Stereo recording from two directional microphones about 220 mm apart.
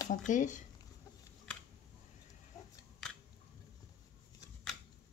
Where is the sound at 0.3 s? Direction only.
35° left (ahead or behind).